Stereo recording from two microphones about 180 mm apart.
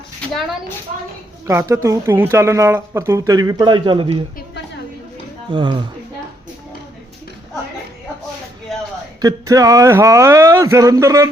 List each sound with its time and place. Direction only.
1.5 s speech: 15° right (ahead or behind)
5.5 s speech: 25° right (ahead or behind)
9.2 s speech: 20° right (ahead or behind)